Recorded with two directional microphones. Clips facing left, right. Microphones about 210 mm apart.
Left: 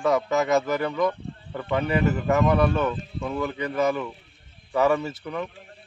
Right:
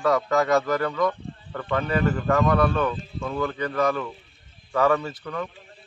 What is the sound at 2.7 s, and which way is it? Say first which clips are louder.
Speech: even; 20° left (ahead or behind).